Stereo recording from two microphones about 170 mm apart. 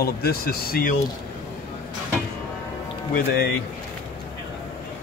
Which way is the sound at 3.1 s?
65° left (ahead or behind).